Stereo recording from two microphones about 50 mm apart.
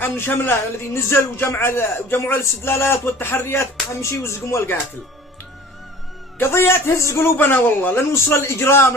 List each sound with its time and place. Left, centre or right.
0.0 s a man's voice: left
6.4 s speech: left
7.3 s a man's voice: left